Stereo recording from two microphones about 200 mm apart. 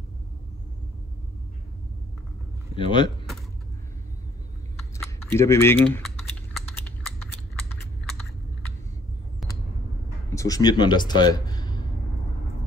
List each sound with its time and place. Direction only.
2.7 s speech: 25° left (ahead or behind)
5.2 s speech: 10° left (ahead or behind)
10.3 s a man's voice: 15° left (ahead or behind)